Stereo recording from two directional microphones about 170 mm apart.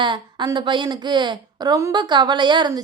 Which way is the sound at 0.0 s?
25° right (ahead or behind).